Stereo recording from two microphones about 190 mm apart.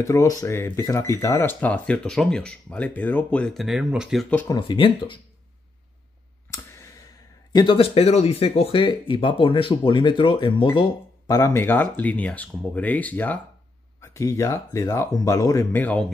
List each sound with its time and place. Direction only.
0.0 s speech: 15° left (ahead or behind)
4.6 s speech: 25° left (ahead or behind)
6.5 s clicking: 15° left (ahead or behind)
7.5 s speech: 25° left (ahead or behind); by 16.1 s 10° left (ahead or behind)